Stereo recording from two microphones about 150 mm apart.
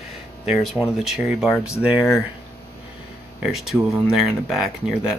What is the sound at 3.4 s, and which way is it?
Speech, centre (ahead or behind).